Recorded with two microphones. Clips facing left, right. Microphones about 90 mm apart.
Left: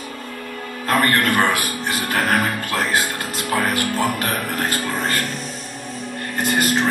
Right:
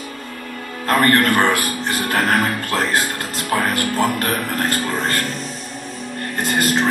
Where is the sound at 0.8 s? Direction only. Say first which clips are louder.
Right 3 dB; 10° left (ahead or behind).